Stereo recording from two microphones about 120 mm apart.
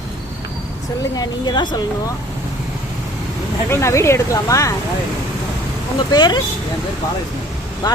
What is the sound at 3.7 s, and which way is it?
Speech, 25° left (ahead or behind).